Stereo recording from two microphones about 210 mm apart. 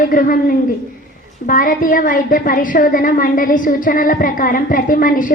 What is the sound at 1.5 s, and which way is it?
A woman's voice, 40° left (ahead or behind).